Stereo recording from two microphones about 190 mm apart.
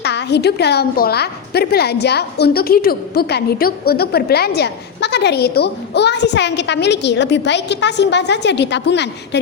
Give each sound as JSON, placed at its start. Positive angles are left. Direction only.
{"t": 0.0, "sound": "a woman's voice", "side_deg": 65}